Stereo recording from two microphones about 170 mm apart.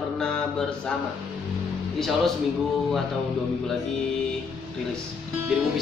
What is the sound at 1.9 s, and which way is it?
Speech, centre (ahead or behind).